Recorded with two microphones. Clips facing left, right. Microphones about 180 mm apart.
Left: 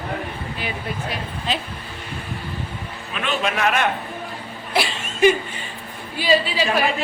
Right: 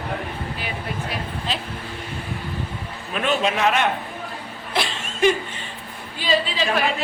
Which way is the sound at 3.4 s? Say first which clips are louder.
Left 1 dB; 20° right (ahead or behind).